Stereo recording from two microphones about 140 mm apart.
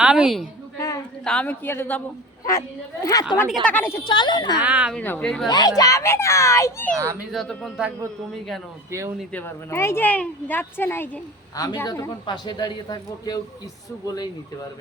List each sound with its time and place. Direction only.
0.0 s a woman's voice: 5° right (ahead or behind)
1.2 s a woman's voice: 5° left (ahead or behind); by 3.3 s 25° left (ahead or behind)
3.5 s a woman's voice: 10° left (ahead or behind)
4.0 s a man's voice: 35° left (ahead or behind)
4.6 s speech: 10° right (ahead or behind)
4.9 s a woman's voice: 10° left (ahead or behind)
5.5 s a child's voice: 30° left (ahead or behind)
6.9 s speech: 20° right (ahead or behind)
7.3 s speech: centre (ahead or behind)
9.3 s a woman's voice: 15° left (ahead or behind)
11.5 s a child's voice: 25° left (ahead or behind)